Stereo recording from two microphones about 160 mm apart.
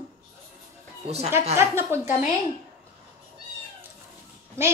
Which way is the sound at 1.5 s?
15° right (ahead or behind).